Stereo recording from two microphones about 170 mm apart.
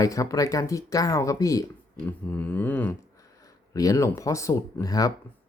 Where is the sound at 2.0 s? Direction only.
10° left (ahead or behind).